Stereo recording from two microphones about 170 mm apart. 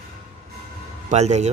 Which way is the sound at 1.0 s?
40° right (ahead or behind).